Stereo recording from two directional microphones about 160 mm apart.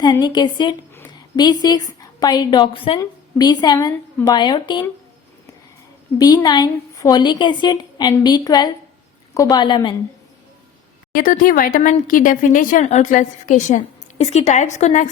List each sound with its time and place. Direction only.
0.0 s a woman's voice: 25° left (ahead or behind)
6.1 s a woman's voice: 25° left (ahead or behind)
11.1 s speech: 60° left (ahead or behind)